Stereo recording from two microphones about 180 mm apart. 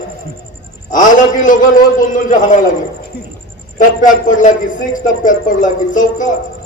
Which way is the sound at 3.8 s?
45° left (ahead or behind).